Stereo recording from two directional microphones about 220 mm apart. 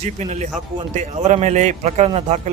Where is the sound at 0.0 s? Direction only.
30° right (ahead or behind).